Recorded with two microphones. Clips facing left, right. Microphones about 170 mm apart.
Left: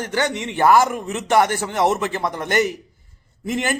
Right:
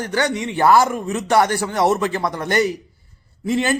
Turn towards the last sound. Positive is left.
turn(degrees=20)  # may be behind; listen again after turning